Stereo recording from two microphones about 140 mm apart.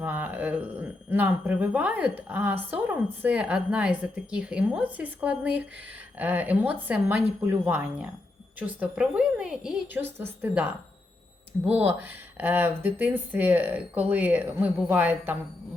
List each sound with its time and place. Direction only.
0.0 s speech: 10° right (ahead or behind)
11.7 s speech: 15° right (ahead or behind)